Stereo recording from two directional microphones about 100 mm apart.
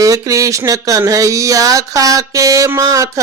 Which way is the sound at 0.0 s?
35° right (ahead or behind).